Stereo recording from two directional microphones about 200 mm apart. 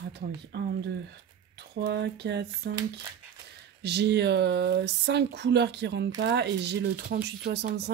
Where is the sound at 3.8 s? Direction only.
55° right (ahead or behind).